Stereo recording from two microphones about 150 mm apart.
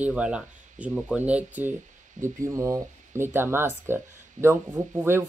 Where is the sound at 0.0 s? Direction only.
5° right (ahead or behind).